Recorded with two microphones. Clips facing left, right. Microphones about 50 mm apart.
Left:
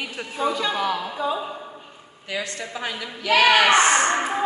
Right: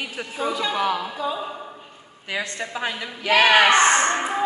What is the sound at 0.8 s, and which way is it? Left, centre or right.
Speech, centre.